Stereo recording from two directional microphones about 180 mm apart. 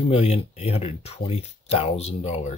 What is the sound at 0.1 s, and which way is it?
Speech, 35° left (ahead or behind).